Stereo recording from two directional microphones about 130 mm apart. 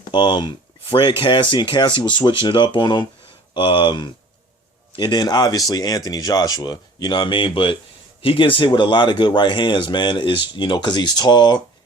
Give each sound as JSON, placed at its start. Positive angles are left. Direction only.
{"t": 0.1, "sound": "speech", "side_deg": 35}